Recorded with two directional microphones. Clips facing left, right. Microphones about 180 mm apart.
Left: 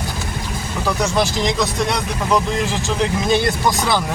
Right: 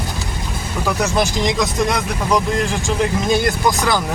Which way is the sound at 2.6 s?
Centre (ahead or behind).